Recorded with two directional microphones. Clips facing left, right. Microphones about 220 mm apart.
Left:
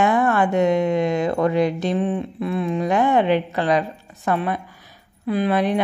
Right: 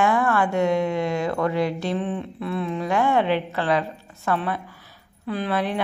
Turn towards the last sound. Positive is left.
turn(degrees=15)  # may be behind; listen again after turning